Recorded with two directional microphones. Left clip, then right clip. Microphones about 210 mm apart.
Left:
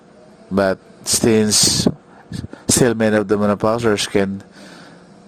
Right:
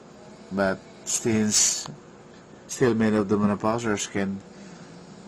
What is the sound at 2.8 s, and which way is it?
Speech, 50° left (ahead or behind).